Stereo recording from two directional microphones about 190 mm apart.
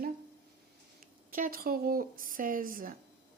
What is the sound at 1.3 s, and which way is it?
Speech, 50° right (ahead or behind).